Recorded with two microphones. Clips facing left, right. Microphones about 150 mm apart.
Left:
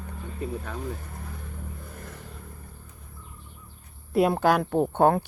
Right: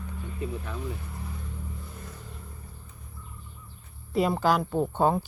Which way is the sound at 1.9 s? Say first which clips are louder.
Left 2 dB; 55° left (ahead or behind).